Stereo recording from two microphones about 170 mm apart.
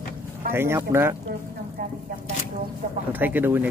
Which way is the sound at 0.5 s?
15° right (ahead or behind).